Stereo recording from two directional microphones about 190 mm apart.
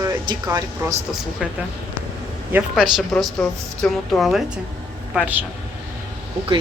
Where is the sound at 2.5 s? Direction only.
Centre (ahead or behind).